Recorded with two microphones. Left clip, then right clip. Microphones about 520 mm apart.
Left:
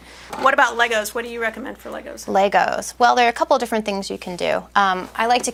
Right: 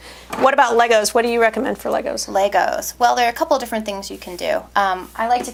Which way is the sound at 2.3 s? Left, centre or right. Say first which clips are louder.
Left 1 dB; left.